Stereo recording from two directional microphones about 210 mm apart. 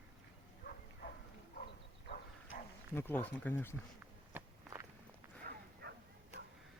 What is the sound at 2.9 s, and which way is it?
Speech, 10° left (ahead or behind).